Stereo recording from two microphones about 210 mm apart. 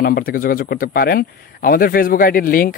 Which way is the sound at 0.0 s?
45° left (ahead or behind).